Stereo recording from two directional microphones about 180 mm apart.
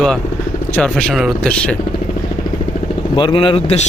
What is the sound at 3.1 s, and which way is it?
Speech, 25° left (ahead or behind).